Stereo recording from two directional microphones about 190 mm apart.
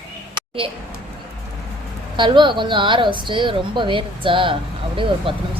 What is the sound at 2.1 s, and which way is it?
Speech, 25° right (ahead or behind).